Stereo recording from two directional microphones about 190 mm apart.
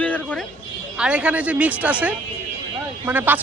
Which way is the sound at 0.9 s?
5° right (ahead or behind).